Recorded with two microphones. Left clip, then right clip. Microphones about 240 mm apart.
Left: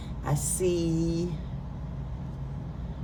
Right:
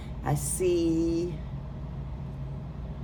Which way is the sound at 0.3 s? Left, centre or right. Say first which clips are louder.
Right 1 dB; right.